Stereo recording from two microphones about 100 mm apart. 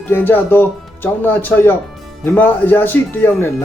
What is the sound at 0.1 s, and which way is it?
Speech, 20° left (ahead or behind).